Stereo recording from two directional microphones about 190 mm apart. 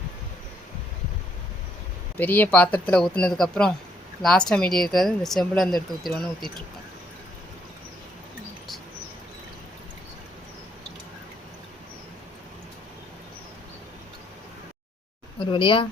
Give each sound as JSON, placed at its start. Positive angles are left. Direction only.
{"t": 2.1, "sound": "speech", "side_deg": 10}
{"t": 15.4, "sound": "speech", "side_deg": 25}